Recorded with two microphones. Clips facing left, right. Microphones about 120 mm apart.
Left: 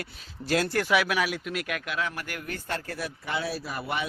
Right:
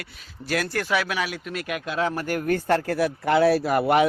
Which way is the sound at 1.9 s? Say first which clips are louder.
Right 7 dB; 30° right (ahead or behind).